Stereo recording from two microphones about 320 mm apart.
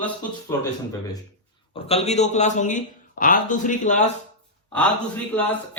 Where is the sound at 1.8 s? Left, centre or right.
Centre.